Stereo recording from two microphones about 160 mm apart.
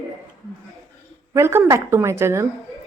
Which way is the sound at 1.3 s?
15° right (ahead or behind).